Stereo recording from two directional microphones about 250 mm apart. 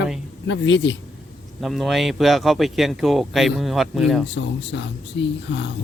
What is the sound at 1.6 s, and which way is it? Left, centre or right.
Speech, centre.